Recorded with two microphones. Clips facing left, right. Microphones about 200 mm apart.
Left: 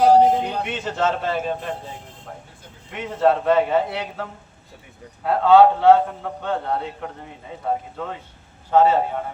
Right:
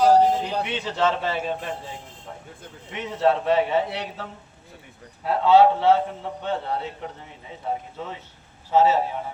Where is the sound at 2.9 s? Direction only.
55° left (ahead or behind).